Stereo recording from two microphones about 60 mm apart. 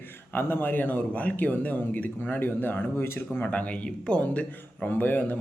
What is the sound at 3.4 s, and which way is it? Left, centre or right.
Speech, left.